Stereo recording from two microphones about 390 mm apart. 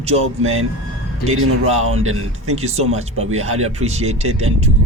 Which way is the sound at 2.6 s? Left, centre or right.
Centre.